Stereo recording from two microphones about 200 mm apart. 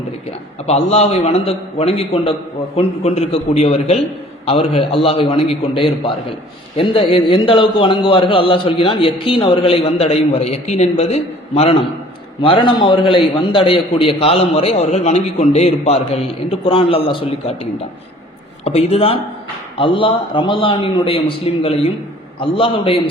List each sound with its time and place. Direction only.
0.7 s a man's voice: 30° left (ahead or behind)